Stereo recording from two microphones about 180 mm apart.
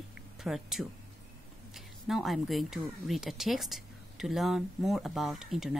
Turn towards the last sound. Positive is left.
turn(degrees=-5)  # may be behind; listen again after turning